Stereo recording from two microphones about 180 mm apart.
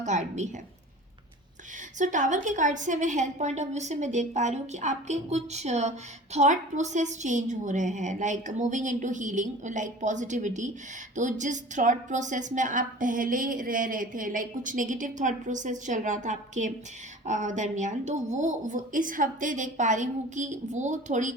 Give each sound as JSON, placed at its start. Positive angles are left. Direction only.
{"t": 0.0, "sound": "a woman's voice", "side_deg": -40}
{"t": 2.0, "sound": "a woman's voice", "side_deg": -45}